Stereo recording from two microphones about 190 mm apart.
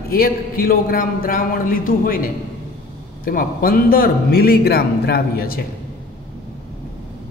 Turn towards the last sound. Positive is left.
turn(degrees=50)  # may be behind; listen again after turning